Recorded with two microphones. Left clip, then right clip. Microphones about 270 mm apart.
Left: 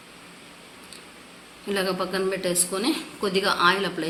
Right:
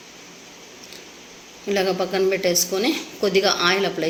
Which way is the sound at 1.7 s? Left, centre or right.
Centre.